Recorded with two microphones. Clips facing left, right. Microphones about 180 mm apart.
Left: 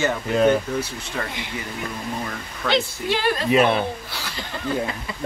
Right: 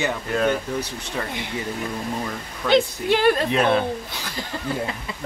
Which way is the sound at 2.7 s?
55° right (ahead or behind).